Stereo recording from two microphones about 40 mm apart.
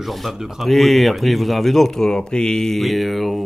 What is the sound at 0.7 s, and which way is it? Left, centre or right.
Speech, centre.